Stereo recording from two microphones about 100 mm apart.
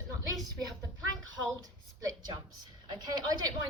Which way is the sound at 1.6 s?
40° right (ahead or behind).